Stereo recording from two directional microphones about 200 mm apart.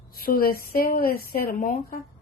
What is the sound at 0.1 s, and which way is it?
A woman's voice, 50° left (ahead or behind).